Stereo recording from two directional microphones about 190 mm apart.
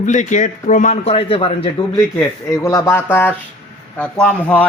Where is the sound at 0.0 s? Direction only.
40° left (ahead or behind).